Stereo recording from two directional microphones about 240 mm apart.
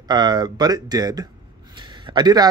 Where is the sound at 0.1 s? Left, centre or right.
Centre.